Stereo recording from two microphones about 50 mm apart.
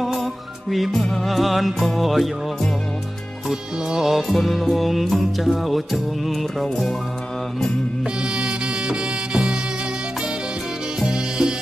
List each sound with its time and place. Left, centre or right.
0.0 s music: centre
3.9 s music: centre
8.2 s music: centre
11.0 s music: centre